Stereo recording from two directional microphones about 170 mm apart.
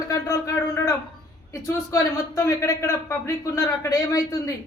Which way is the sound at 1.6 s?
20° left (ahead or behind).